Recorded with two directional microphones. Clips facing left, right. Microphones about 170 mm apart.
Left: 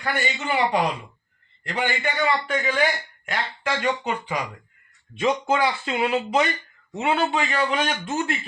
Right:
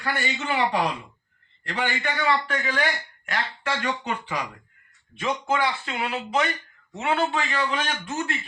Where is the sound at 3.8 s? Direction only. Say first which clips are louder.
Left 3 dB; 15° left (ahead or behind).